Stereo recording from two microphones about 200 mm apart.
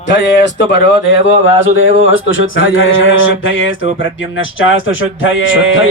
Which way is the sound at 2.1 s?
75° left (ahead or behind).